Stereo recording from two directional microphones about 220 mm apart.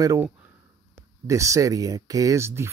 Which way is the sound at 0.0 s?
15° right (ahead or behind).